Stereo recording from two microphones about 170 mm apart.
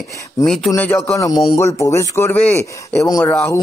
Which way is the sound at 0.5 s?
5° left (ahead or behind).